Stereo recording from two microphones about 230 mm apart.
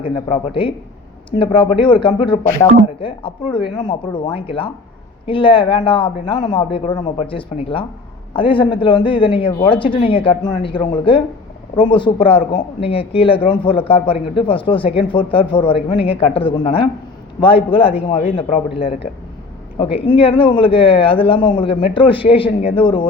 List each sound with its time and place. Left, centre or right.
0.6 s speech: left
19.8 s speech: left